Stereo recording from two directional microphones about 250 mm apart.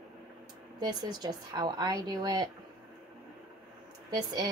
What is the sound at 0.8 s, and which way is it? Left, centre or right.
A woman's voice, centre.